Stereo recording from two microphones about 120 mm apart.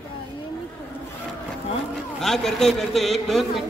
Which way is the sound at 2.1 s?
5° left (ahead or behind).